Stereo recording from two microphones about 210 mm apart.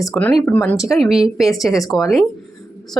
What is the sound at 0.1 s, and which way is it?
Speech, 5° left (ahead or behind).